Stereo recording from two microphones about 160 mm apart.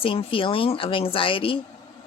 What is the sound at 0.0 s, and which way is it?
A woman's voice, 35° left (ahead or behind).